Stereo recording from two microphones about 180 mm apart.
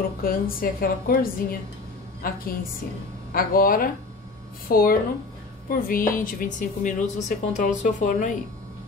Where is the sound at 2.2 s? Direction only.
55° left (ahead or behind).